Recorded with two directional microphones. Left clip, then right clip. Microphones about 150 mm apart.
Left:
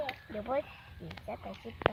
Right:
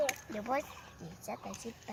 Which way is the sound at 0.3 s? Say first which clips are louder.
Left 3 dB; 40° left (ahead or behind).